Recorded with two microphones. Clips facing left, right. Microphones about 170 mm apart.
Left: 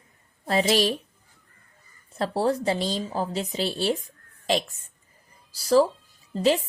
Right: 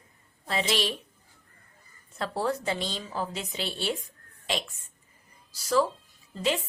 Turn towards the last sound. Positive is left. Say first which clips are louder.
# left 7 dB
turn(degrees=35)  # may be behind; listen again after turning